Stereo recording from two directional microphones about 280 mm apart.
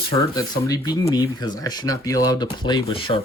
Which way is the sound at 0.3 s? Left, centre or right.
Centre.